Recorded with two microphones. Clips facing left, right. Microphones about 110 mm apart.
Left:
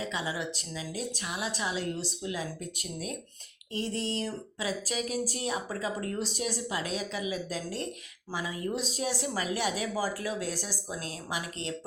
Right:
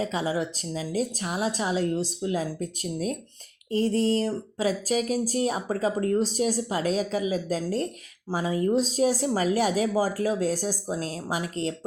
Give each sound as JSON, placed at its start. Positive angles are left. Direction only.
{"t": 0.0, "sound": "speech", "side_deg": -40}